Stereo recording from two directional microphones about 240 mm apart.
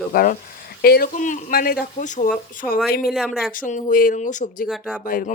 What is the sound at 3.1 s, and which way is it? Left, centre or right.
Speech, centre.